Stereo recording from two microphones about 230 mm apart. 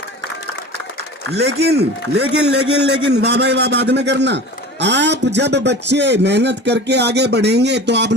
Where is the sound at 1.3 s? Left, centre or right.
Right.